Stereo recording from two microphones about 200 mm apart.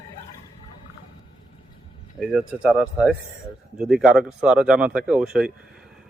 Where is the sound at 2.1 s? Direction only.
5° right (ahead or behind).